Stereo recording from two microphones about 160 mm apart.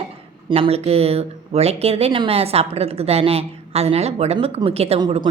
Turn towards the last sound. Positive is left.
turn(degrees=-30)  # may be behind; listen again after turning